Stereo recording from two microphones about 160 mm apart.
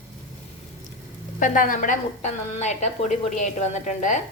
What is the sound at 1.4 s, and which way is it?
A woman's voice, 55° left (ahead or behind).